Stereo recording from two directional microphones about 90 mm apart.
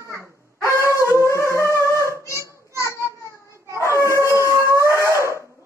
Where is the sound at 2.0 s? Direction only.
35° right (ahead or behind).